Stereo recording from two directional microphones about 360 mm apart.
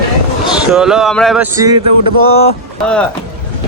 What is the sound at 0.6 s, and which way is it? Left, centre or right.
Speech, centre.